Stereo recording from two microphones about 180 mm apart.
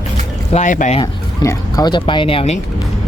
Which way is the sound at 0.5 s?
45° left (ahead or behind).